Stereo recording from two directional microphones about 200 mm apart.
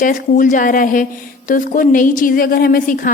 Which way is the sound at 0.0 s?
40° left (ahead or behind).